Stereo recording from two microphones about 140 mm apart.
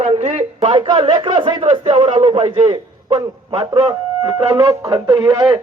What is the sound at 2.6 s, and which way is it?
A man's voice, 30° right (ahead or behind).